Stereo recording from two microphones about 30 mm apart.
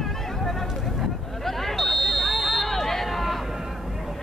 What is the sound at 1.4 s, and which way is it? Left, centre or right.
Hubbub, centre.